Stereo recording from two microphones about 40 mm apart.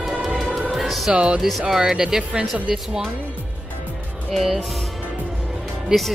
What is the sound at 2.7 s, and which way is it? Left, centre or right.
Speech, centre.